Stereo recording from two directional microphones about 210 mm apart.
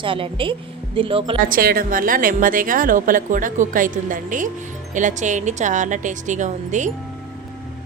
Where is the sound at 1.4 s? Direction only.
45° right (ahead or behind).